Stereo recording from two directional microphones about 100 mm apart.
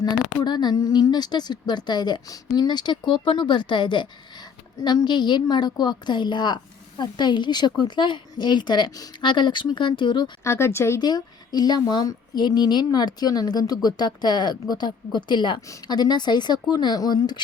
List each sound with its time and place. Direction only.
0.4 s a woman's voice: 45° left (ahead or behind)
10.4 s speech: 25° left (ahead or behind)
11.0 s a woman's voice: 45° left (ahead or behind)